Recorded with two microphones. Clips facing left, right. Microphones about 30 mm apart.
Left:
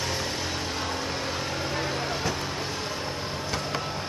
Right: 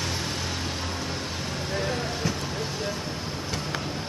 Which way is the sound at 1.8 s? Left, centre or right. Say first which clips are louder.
Even; centre.